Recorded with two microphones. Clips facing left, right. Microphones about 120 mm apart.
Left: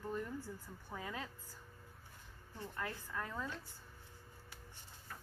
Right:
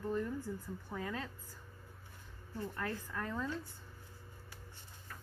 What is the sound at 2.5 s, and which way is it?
Speech, 15° left (ahead or behind).